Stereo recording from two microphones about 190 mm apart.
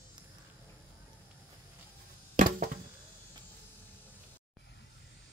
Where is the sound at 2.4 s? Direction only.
45° right (ahead or behind).